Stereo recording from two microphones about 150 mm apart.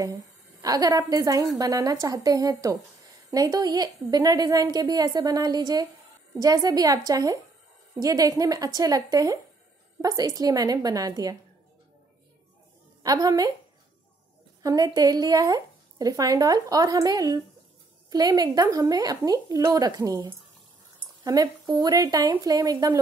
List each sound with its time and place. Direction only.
0.0 s a woman's voice: 20° right (ahead or behind)
13.0 s speech: 25° right (ahead or behind)
14.6 s speech: 25° right (ahead or behind)